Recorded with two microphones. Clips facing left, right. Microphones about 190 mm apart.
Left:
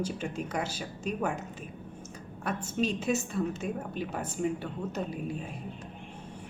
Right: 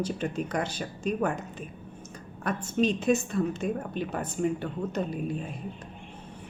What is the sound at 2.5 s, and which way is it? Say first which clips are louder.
Speech: right 4 dB; 10° left (ahead or behind).